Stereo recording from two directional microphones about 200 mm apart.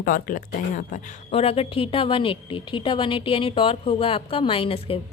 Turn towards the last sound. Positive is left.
turn(degrees=30)  # may be behind; listen again after turning